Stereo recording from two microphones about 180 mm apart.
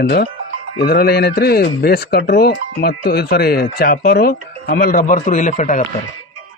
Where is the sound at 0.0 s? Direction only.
60° left (ahead or behind); by 5.8 s 45° left (ahead or behind).